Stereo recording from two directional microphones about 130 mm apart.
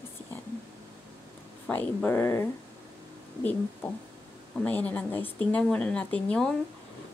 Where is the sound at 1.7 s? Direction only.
15° left (ahead or behind).